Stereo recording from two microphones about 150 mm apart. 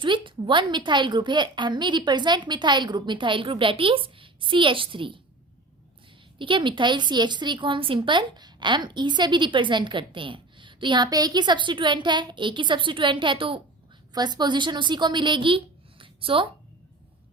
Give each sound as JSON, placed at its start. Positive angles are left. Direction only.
{"t": 0.0, "sound": "a woman's voice", "side_deg": -35}
{"t": 6.4, "sound": "a woman's voice", "side_deg": -30}